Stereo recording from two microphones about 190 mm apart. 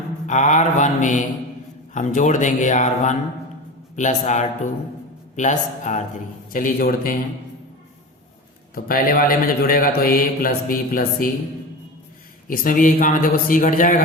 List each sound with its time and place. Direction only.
0.3 s a man's voice: 40° left (ahead or behind)
8.7 s a man's voice: 50° left (ahead or behind)
12.5 s a man's voice: 45° left (ahead or behind)